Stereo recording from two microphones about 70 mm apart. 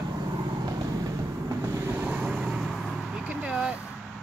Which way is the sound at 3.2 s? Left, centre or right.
Centre.